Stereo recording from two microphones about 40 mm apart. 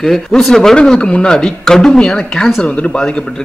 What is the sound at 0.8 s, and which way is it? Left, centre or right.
Speech, left.